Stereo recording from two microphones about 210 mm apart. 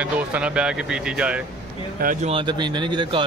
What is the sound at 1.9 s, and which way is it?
Speech, 40° right (ahead or behind).